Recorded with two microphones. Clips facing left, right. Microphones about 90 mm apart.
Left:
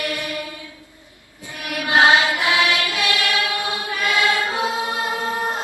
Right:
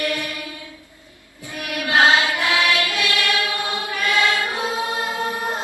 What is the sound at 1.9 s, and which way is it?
Music, 20° left (ahead or behind).